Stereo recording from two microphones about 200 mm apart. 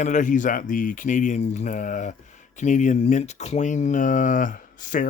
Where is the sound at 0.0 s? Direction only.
40° left (ahead or behind).